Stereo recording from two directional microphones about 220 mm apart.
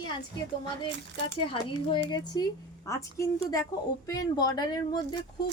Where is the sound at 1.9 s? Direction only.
20° left (ahead or behind).